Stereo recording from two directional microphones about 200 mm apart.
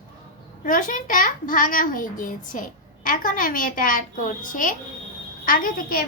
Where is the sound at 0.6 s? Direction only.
40° left (ahead or behind).